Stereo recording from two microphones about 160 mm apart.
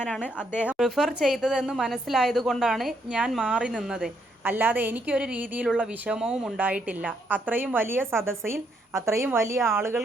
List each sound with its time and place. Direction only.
0.0 s a woman's voice: 10° left (ahead or behind)
0.7 s a woman's voice: centre (ahead or behind)